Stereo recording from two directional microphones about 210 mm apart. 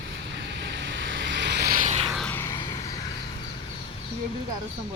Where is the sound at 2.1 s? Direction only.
5° left (ahead or behind).